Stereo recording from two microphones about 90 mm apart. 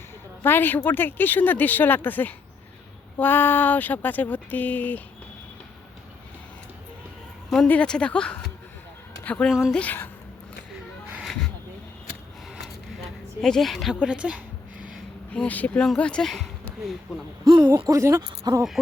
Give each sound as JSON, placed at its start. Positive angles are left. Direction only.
{"t": 0.4, "sound": "speech", "side_deg": 25}
{"t": 7.7, "sound": "speech", "side_deg": 10}
{"t": 9.5, "sound": "a woman's voice", "side_deg": -5}
{"t": 9.7, "sound": "speech", "side_deg": 20}
{"t": 11.2, "sound": "a sound", "side_deg": 5}
{"t": 13.4, "sound": "a woman's voice", "side_deg": 5}
{"t": 14.0, "sound": "a sound", "side_deg": -10}
{"t": 15.3, "sound": "speech", "side_deg": 15}
{"t": 17.4, "sound": "speech", "side_deg": -45}
{"t": 18.2, "sound": "speech", "side_deg": -50}